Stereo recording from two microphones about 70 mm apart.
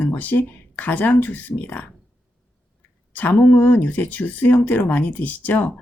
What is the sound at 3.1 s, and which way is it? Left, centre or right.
Speech, left.